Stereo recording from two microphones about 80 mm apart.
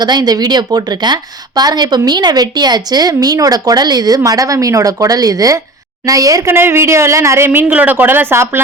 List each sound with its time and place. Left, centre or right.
0.0 s a woman's voice: right
6.4 s speech: right
7.7 s speech: right